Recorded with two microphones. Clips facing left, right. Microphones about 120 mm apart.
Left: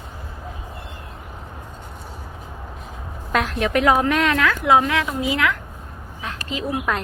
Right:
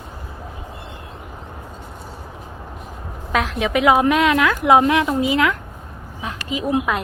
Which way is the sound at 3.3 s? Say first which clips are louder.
Right 1 dB; centre (ahead or behind).